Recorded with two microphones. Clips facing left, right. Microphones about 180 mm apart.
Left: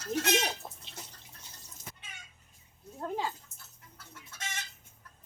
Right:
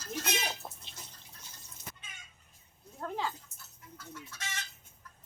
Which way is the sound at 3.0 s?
15° left (ahead or behind).